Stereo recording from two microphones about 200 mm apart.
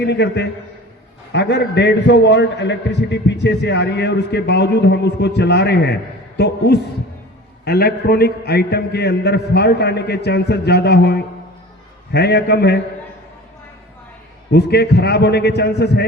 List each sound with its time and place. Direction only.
0.0 s a man's voice: 60° left (ahead or behind)
14.5 s a man's voice: 55° left (ahead or behind)